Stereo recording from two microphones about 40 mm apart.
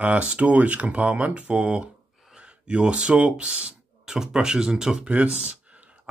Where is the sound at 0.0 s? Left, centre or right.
Right.